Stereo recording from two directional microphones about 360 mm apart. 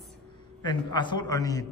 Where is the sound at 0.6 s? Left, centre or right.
Centre.